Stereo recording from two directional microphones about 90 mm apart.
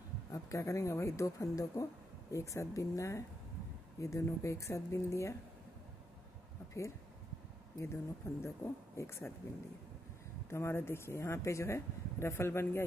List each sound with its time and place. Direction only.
0.3 s speech: 35° left (ahead or behind)
7.8 s speech: 30° left (ahead or behind)
10.5 s speech: 30° left (ahead or behind)